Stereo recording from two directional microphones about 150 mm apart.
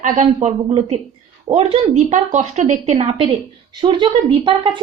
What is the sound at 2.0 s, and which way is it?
Speech, 55° right (ahead or behind).